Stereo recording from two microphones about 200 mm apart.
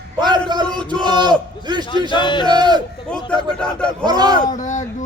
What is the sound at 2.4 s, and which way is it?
Speech, 20° right (ahead or behind).